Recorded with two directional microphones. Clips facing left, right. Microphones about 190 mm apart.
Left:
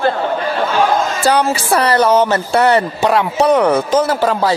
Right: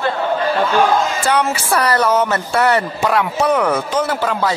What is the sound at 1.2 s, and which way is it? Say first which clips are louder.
Speech: left 3 dB; 35° left (ahead or behind).